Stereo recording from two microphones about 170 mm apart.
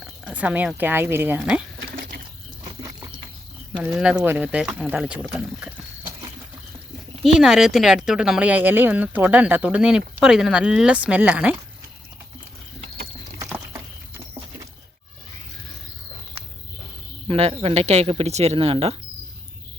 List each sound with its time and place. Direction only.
0.3 s speech: 10° right (ahead or behind)
2.6 s a sound: 20° right (ahead or behind)
3.8 s speech: 5° right (ahead or behind)
7.2 s speech: 5° right (ahead or behind)
17.2 s speech: 35° right (ahead or behind)